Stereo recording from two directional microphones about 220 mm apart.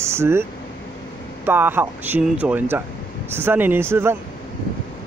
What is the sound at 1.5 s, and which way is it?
Speech, 10° right (ahead or behind).